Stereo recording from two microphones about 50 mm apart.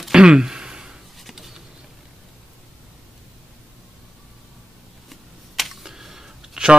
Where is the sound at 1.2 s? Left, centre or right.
Centre.